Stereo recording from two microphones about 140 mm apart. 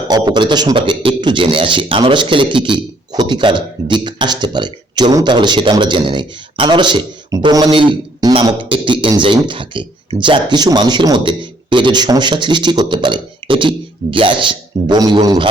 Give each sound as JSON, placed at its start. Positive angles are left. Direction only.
{"t": 0.1, "sound": "a man's voice", "side_deg": -30}